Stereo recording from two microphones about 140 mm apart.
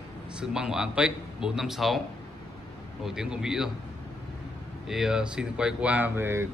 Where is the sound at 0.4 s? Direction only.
5° right (ahead or behind).